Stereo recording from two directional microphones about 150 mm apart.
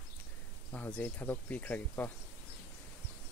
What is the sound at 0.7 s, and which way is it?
Speech, 10° left (ahead or behind).